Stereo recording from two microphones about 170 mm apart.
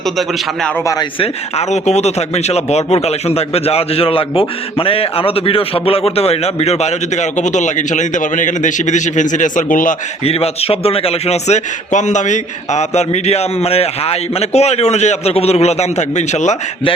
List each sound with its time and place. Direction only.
0.0 s a man's voice: centre (ahead or behind)
1.2 s speech: 40° left (ahead or behind)
10.2 s speech: 35° left (ahead or behind)